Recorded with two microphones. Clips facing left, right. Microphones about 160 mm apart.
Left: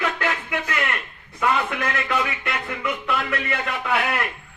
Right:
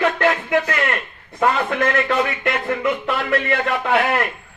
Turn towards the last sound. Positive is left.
turn(degrees=-45)  # may be behind; listen again after turning